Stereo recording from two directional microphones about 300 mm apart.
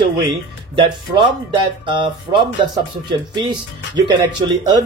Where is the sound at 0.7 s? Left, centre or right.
Centre.